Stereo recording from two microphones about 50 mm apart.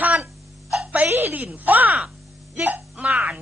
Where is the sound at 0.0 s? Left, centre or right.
Right.